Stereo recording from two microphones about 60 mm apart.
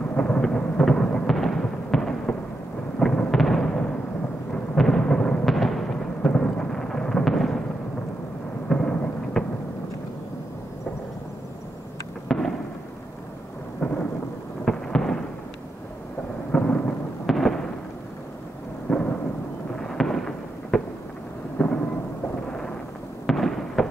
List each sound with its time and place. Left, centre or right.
0.1 s thunder: centre
1.3 s a sound: centre
3.0 s fireworks: centre
4.7 s thunder: centre
5.4 s a sound: centre
8.6 s thunder: centre
12.3 s fireworks: centre
14.6 s a sound: centre
16.5 s thunder: centre
17.3 s fireworks: centre
18.9 s thunder: centre
19.8 s fireworks: centre
21.6 s thunder: centre
23.2 s fireworks: centre